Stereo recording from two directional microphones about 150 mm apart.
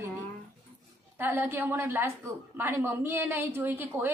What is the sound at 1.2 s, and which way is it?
A woman's voice, 15° right (ahead or behind).